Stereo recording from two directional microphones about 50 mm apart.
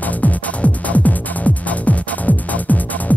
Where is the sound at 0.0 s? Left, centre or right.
Left.